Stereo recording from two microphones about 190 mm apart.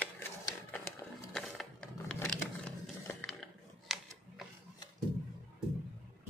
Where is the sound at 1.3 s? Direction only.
5° left (ahead or behind).